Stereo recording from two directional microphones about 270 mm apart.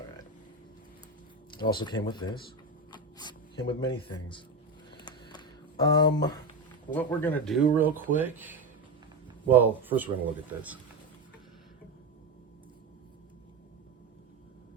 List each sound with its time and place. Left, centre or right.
1.5 s speech: centre
4.9 s a sound: centre
6.9 s speech: centre